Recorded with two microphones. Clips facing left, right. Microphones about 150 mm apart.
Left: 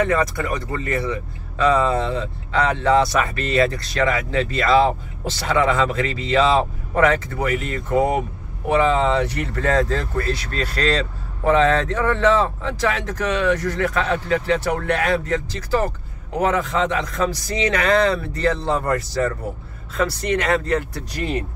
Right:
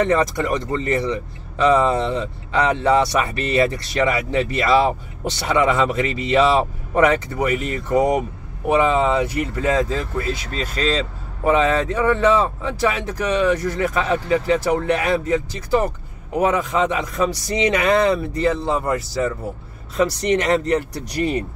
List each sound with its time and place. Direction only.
0.1 s speech: 20° right (ahead or behind); by 19.3 s 5° right (ahead or behind)
20.0 s speech: 15° right (ahead or behind)